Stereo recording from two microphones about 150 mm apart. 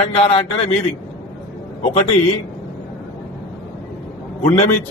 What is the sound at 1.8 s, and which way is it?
Speech, 50° left (ahead or behind).